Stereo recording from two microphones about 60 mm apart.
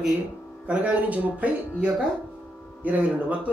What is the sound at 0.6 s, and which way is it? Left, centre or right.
Speech, right.